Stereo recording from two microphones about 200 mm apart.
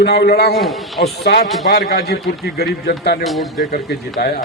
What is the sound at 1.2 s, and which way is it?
Speech, 50° left (ahead or behind).